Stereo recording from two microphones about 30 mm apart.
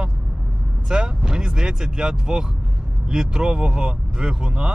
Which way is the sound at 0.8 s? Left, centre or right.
Right.